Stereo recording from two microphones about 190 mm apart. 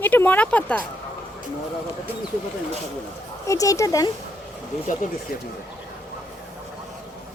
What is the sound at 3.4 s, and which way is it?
Speech, 15° left (ahead or behind).